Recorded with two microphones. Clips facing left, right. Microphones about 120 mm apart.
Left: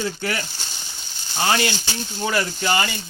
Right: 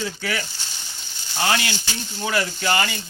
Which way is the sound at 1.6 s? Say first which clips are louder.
Left 5 dB; 30° left (ahead or behind).